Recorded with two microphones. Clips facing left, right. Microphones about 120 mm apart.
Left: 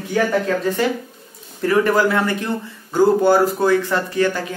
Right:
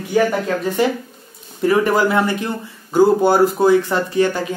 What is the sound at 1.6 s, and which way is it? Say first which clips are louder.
Speech: right 1 dB; 15° right (ahead or behind).